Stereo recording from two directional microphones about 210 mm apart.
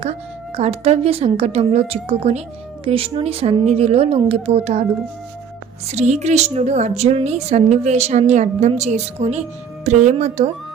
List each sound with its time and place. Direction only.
0.0 s a woman's voice: 30° right (ahead or behind)
5.9 s a woman's voice: 30° right (ahead or behind)